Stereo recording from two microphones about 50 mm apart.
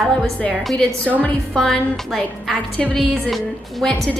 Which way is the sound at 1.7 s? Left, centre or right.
Centre.